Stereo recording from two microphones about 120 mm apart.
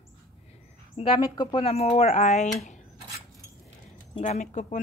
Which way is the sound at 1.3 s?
35° left (ahead or behind).